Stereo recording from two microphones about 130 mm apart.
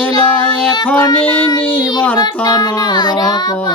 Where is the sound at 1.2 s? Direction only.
10° left (ahead or behind).